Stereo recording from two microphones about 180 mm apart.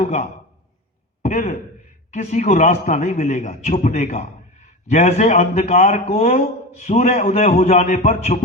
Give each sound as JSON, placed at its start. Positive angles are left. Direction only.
{"t": 0.0, "sound": "a man's voice", "side_deg": 40}